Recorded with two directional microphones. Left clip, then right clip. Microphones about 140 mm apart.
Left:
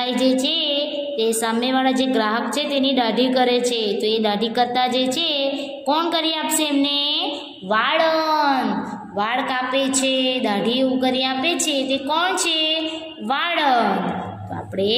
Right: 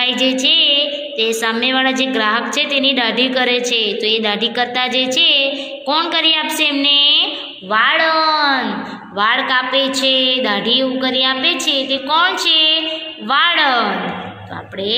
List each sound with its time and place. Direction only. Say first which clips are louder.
0.0 s music: right 5 dB; 35° left (ahead or behind)
1.4 s a woman's voice: right 4 dB; 35° left (ahead or behind)
7.7 s a woman's voice: right 4 dB; 45° left (ahead or behind)